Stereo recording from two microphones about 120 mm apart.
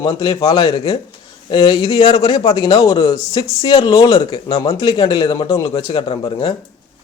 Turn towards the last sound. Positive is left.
turn(degrees=40)  # may be behind; listen again after turning